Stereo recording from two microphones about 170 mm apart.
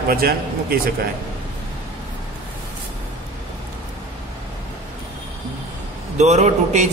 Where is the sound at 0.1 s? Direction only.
60° right (ahead or behind).